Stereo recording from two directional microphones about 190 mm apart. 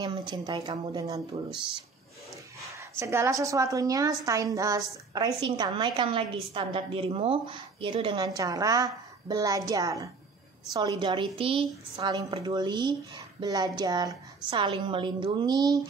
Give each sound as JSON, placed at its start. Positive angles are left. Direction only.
{"t": 0.0, "sound": "a woman's voice", "side_deg": -25}
{"t": 1.5, "sound": "speech", "side_deg": -5}
{"t": 3.0, "sound": "a woman's voice", "side_deg": -15}